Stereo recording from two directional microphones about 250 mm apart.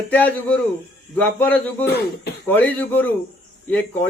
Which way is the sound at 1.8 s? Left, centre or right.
Left.